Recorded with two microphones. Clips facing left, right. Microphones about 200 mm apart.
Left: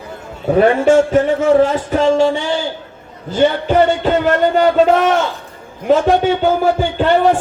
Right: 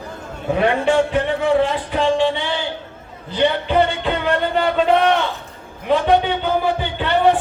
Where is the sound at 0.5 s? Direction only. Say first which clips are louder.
Left 6 dB; 45° left (ahead or behind).